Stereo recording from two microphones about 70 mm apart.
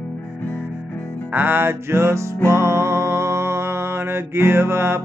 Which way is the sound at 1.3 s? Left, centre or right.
Right.